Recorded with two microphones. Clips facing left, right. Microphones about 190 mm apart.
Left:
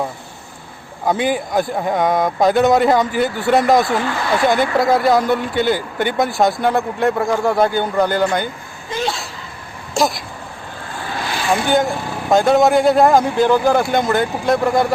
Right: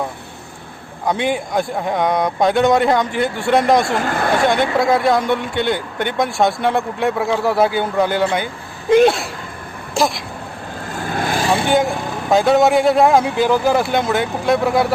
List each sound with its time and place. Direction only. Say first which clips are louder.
1.0 s speech: left 1 dB; 5° left (ahead or behind)
3.9 s speech: right 1 dB; 50° right (ahead or behind)
4.4 s speech: left 2 dB; centre (ahead or behind)
8.9 s a sound: right 11 dB; 60° right (ahead or behind)
9.9 s speech: even; centre (ahead or behind)
10.9 s vehicle: right 4 dB; 45° right (ahead or behind)
11.7 s speech: even; centre (ahead or behind)